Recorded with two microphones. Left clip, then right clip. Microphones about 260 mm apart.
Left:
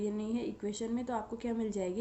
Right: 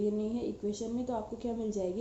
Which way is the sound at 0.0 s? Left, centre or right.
Left.